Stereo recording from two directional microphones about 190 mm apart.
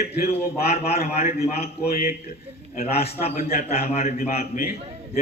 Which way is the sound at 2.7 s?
35° left (ahead or behind).